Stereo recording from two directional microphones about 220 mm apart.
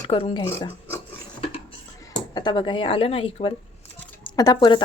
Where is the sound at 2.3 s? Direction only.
20° left (ahead or behind).